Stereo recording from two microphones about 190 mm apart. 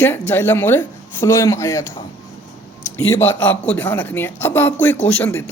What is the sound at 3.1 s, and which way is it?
A man's voice, 10° left (ahead or behind).